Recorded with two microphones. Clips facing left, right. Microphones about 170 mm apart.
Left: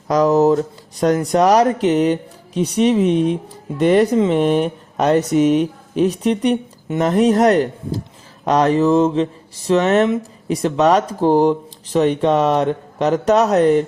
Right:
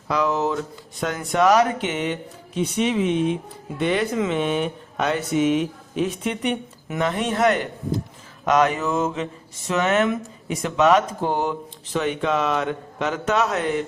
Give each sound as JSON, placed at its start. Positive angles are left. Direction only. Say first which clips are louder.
{"t": 0.1, "sound": "speech", "louder": "left 9 dB", "side_deg": 40}